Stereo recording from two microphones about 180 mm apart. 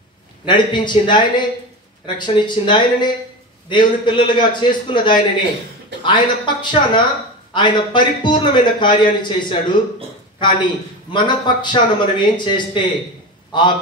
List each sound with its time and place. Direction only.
0.5 s a man's voice: 25° left (ahead or behind)